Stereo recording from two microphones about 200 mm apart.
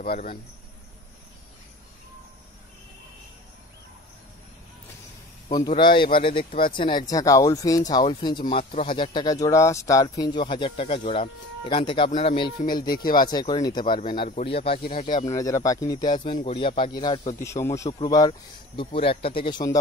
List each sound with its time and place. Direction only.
0.0 s speech: 45° left (ahead or behind)
5.7 s speech: 25° left (ahead or behind)
12.8 s speech: 45° left (ahead or behind)
13.1 s speech: 20° left (ahead or behind)
17.8 s speech: 30° left (ahead or behind)